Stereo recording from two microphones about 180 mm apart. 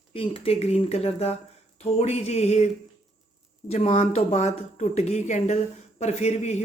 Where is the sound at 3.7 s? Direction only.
35° left (ahead or behind).